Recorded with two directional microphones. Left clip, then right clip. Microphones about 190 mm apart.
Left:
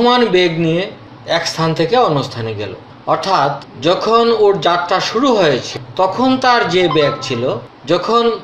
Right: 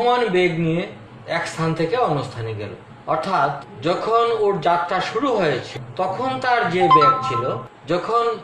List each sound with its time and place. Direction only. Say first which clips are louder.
0.0 s a man's voice: left 6 dB; 40° left (ahead or behind)